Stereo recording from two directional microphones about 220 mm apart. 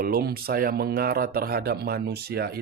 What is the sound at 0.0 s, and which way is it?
Speech, 45° right (ahead or behind).